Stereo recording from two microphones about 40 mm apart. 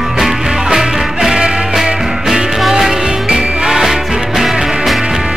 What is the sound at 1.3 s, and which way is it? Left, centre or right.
Music, right.